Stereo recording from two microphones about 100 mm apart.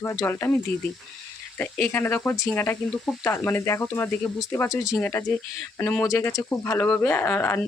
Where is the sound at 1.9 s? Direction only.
20° left (ahead or behind).